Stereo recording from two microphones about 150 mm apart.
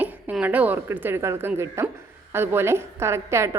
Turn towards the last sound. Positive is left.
turn(degrees=-20)  # may be behind; listen again after turning